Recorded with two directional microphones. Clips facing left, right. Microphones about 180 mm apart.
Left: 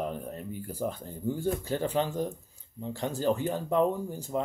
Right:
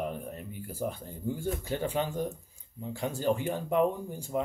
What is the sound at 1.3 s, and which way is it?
Speech, 40° left (ahead or behind).